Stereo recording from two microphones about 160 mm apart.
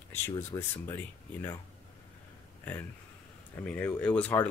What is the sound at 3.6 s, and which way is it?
Speech, 10° left (ahead or behind).